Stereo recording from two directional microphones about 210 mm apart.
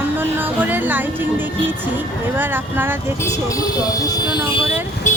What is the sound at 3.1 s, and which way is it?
Speech, 15° left (ahead or behind).